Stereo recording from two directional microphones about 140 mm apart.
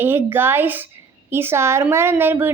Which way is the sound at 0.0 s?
15° right (ahead or behind).